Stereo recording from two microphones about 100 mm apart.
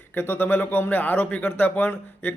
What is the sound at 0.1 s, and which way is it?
A man's voice, 20° left (ahead or behind).